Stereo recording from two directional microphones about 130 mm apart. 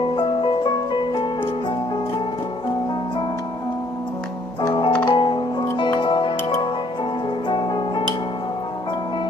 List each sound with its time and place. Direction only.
0.0 s music: 40° left (ahead or behind)
4.6 s music: 35° left (ahead or behind)